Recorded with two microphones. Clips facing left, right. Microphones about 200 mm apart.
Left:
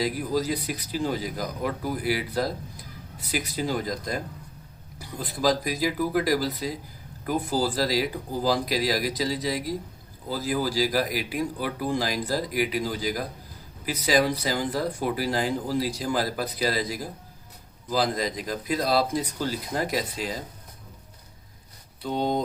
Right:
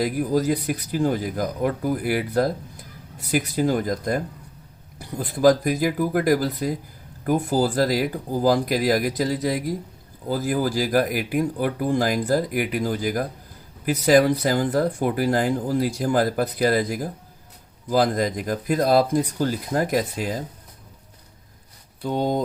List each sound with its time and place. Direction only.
0.0 s speech: 50° right (ahead or behind)
5.3 s speech: 55° right (ahead or behind)
22.0 s speech: 50° right (ahead or behind)